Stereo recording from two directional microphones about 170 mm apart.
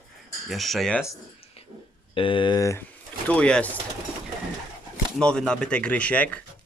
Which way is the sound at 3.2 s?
5° left (ahead or behind).